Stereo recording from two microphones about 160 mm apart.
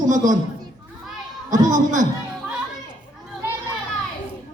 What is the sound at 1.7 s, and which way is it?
Speech, 55° right (ahead or behind).